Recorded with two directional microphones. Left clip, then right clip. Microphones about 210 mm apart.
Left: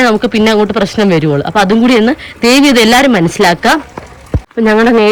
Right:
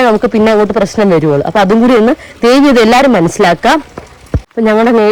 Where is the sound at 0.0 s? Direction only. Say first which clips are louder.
Right 1 dB; 15° right (ahead or behind).